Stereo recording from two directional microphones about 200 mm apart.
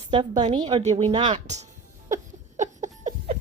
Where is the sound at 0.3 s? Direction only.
35° right (ahead or behind).